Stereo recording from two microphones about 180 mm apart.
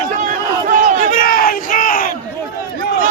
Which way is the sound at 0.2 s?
45° right (ahead or behind).